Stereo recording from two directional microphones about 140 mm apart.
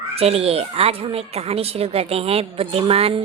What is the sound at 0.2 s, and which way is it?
A woman's voice, 45° right (ahead or behind).